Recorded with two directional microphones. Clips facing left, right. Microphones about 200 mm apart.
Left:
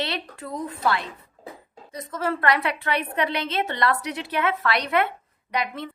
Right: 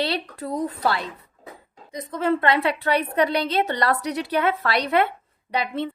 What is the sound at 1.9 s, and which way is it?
A woman's voice, 15° right (ahead or behind).